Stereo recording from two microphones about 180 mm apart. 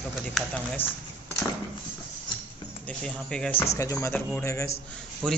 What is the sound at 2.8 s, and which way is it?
Speech, 5° left (ahead or behind).